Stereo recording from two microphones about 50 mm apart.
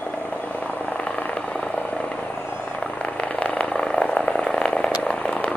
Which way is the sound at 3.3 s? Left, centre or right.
Left.